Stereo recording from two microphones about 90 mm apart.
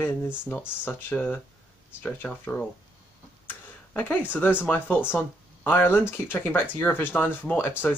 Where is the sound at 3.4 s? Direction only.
20° left (ahead or behind).